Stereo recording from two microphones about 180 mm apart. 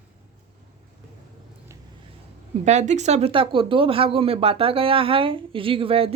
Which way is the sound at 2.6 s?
40° right (ahead or behind).